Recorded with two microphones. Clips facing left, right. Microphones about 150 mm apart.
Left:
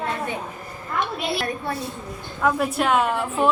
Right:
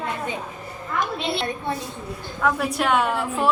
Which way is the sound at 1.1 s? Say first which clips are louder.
Even; 25° right (ahead or behind).